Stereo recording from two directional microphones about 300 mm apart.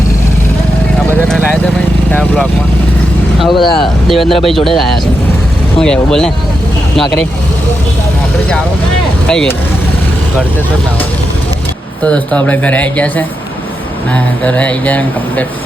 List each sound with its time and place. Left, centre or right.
1.3 s speech: centre
3.5 s speech: centre
3.8 s speech: centre
9.2 s speech: centre
12.0 s speech: centre